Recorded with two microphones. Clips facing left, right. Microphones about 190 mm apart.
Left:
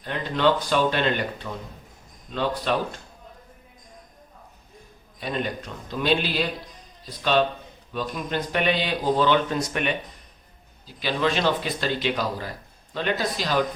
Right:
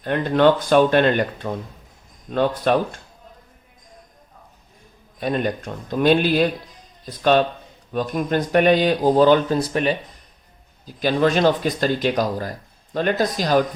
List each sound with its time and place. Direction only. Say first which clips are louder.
0.0 s speech: right 7 dB; 50° right (ahead or behind)
5.2 s speech: right 6 dB; 50° right (ahead or behind)
10.8 s speech: right 6 dB; 45° right (ahead or behind)